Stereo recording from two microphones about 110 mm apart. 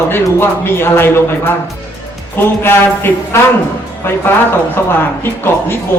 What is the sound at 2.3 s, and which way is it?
A man's voice, 20° left (ahead or behind).